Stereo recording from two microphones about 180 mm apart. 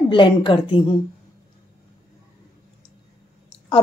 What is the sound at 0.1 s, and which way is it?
Speech, 25° left (ahead or behind).